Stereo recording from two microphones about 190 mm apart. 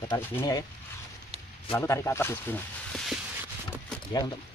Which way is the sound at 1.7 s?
15° left (ahead or behind).